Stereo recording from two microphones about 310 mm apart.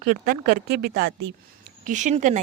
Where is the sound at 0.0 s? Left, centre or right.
Right.